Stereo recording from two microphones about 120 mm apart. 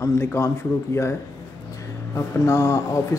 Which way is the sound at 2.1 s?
25° left (ahead or behind).